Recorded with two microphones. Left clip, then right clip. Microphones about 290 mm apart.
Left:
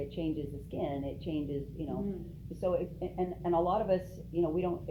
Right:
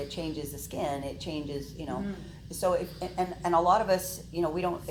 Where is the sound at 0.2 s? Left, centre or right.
Centre.